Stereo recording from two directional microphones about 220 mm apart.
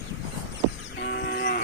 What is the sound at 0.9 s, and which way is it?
Cattle, 55° left (ahead or behind).